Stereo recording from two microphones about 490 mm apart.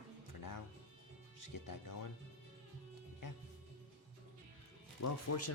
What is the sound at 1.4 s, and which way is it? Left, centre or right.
Speech, left.